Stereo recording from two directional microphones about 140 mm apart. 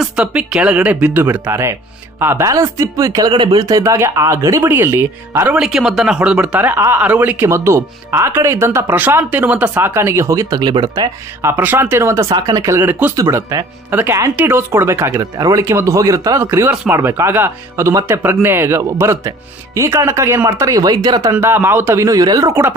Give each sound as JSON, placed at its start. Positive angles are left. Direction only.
{"t": 0.0, "sound": "speech", "side_deg": -5}
{"t": 11.4, "sound": "speech", "side_deg": -15}
{"t": 13.8, "sound": "speech", "side_deg": -15}